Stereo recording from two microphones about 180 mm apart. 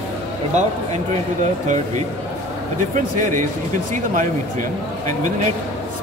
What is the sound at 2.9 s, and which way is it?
Speech, 45° right (ahead or behind).